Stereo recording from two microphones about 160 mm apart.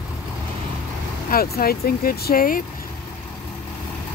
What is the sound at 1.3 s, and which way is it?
Speech, 70° left (ahead or behind).